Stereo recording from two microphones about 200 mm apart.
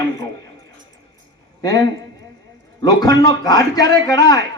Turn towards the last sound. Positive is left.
turn(degrees=20)  # may be behind; listen again after turning